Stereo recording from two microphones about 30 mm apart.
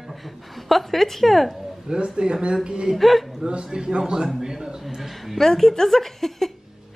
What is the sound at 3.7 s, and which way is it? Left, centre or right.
A man's voice, right.